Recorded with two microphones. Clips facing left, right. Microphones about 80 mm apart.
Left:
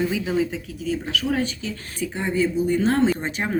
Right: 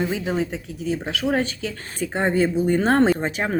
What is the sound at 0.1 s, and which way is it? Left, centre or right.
A woman's voice, right.